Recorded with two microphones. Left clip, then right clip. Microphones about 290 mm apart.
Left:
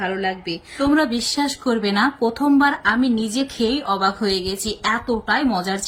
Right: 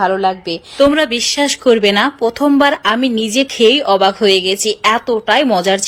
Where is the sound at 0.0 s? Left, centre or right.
Right.